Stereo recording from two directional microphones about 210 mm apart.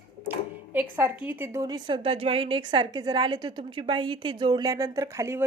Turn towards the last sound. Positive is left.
turn(degrees=-15)  # may be behind; listen again after turning